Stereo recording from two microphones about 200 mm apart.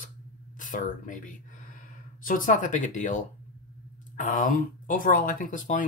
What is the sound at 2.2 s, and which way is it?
Speech, 45° left (ahead or behind).